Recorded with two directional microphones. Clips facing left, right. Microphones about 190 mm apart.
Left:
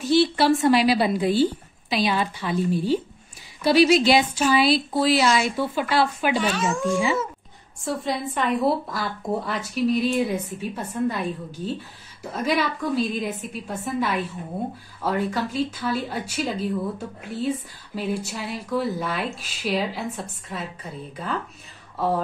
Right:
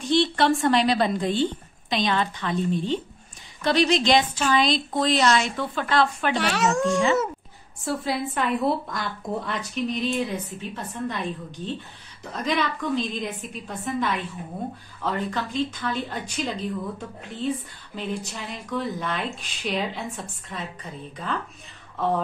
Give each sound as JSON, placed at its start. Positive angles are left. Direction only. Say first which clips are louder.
{"t": 0.0, "sound": "a woman's voice", "louder": "left 2 dB", "side_deg": 5}
{"t": 6.4, "sound": "speech", "louder": "right 1 dB", "side_deg": -75}
{"t": 7.8, "sound": "a woman's voice", "louder": "even", "side_deg": 0}
{"t": 21.9, "sound": "speech", "louder": "left 1 dB", "side_deg": 5}